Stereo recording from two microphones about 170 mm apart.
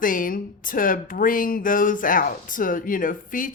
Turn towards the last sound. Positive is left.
turn(degrees=55)  # may be behind; listen again after turning